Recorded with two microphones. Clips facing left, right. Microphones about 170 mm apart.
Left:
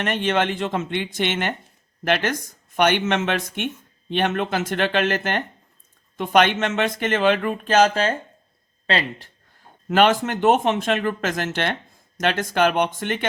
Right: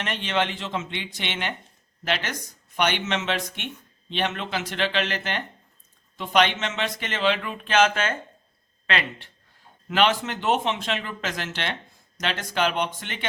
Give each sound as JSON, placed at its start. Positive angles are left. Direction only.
{"t": 0.0, "sound": "speech", "side_deg": 50}
{"t": 9.9, "sound": "speech", "side_deg": 50}